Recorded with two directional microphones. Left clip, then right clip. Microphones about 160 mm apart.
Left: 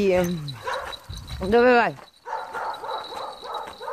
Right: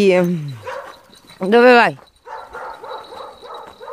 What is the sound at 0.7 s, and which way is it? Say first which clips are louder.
Dog: even; 15° right (ahead or behind).